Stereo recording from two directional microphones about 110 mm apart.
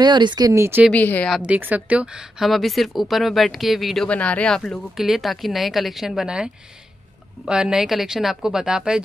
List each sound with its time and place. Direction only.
0.0 s speech: 45° right (ahead or behind)
0.5 s speech: 25° right (ahead or behind)
0.9 s speech: 15° left (ahead or behind)
1.4 s speech: 15° right (ahead or behind)
4.1 s speech: 10° left (ahead or behind); by 9.0 s 5° right (ahead or behind)